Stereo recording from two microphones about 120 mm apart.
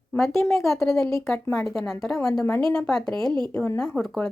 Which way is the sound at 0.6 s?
Centre (ahead or behind).